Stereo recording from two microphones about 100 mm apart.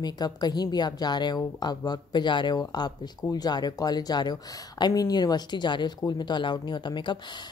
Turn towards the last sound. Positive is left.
turn(degrees=50)  # may be behind; listen again after turning